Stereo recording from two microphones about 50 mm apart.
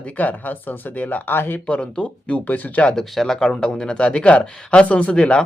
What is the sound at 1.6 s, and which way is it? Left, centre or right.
Speech, left.